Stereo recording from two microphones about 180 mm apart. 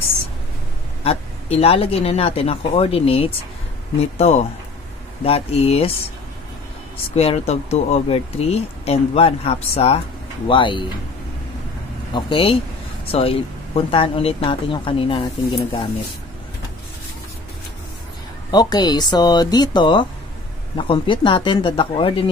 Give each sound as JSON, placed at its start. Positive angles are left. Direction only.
{"t": 1.0, "sound": "speech", "side_deg": 35}
{"t": 7.2, "sound": "speech", "side_deg": 35}
{"t": 12.1, "sound": "speech", "side_deg": 25}
{"t": 18.5, "sound": "speech", "side_deg": 20}